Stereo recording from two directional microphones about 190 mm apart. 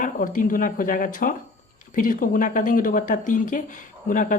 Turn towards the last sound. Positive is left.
turn(degrees=45)  # may be behind; listen again after turning